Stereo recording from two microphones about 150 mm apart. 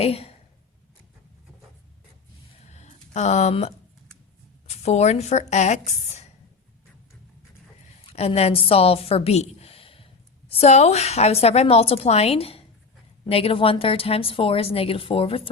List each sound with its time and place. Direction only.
0.0 s speech: 40° left (ahead or behind)
2.6 s a sound: 50° left (ahead or behind)
4.7 s speech: 45° left (ahead or behind)
8.1 s a woman's voice: 45° left (ahead or behind)